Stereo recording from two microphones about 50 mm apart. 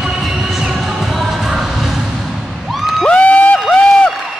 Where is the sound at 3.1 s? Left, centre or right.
Left.